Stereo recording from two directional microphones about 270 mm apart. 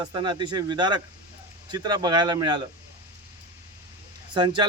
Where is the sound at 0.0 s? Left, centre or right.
Centre.